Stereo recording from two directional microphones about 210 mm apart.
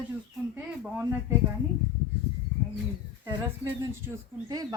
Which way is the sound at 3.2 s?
15° right (ahead or behind).